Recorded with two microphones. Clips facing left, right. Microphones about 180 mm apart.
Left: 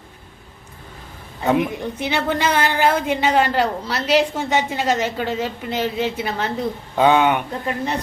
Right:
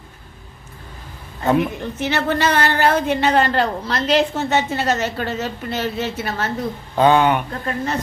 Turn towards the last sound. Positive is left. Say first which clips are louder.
# even
turn(degrees=15)  # may be behind; listen again after turning